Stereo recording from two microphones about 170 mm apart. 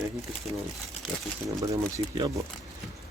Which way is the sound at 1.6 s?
20° right (ahead or behind).